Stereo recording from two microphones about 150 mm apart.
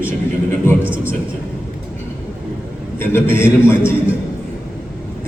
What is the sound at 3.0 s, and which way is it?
Speech, 15° left (ahead or behind).